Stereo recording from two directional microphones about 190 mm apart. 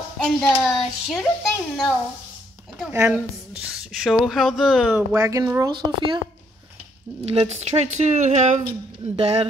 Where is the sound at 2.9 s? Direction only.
10° right (ahead or behind).